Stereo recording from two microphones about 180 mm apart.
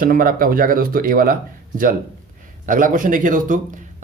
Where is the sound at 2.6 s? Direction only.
45° right (ahead or behind).